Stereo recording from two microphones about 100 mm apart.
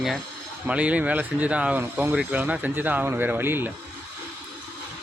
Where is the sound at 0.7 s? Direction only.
15° right (ahead or behind).